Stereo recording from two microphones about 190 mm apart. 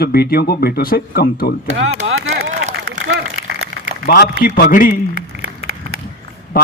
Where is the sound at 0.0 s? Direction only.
55° left (ahead or behind).